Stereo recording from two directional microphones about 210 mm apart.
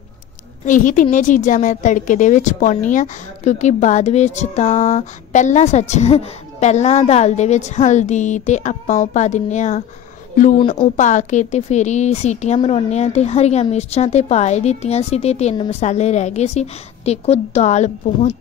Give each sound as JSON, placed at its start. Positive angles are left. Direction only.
{"t": 0.7, "sound": "a woman's voice", "side_deg": 40}
{"t": 11.0, "sound": "a woman's voice", "side_deg": 35}